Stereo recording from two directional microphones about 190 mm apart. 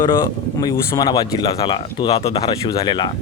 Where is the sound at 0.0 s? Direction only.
20° left (ahead or behind).